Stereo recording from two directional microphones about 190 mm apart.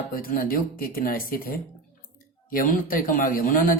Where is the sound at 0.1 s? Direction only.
45° left (ahead or behind).